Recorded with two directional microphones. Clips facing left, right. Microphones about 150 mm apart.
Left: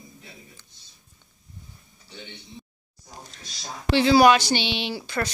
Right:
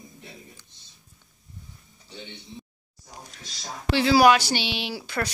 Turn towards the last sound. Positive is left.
turn(degrees=-5)  # may be behind; listen again after turning